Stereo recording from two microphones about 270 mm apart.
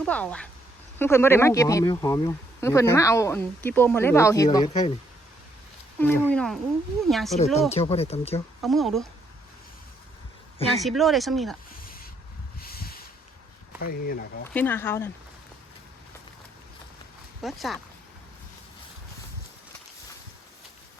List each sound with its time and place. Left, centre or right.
0.0 s speech: centre
4.5 s speech: left
6.0 s speech: centre
7.3 s speech: left
8.6 s speech: centre
10.8 s speech: centre
12.5 s a sound: left
13.8 s speech: left
14.5 s speech: centre
17.4 s speech: centre